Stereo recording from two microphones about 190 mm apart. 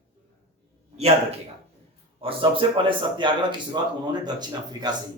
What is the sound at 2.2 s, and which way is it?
A man's voice, 30° right (ahead or behind).